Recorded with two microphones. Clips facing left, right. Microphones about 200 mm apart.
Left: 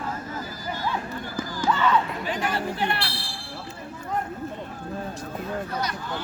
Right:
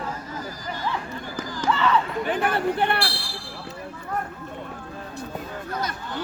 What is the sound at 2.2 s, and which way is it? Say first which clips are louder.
Chatter: right 4 dB; 55° right (ahead or behind).